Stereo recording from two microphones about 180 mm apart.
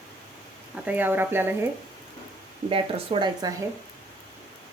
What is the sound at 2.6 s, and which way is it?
Speech, 30° right (ahead or behind).